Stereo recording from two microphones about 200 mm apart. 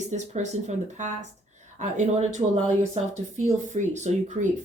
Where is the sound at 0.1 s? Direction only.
35° right (ahead or behind).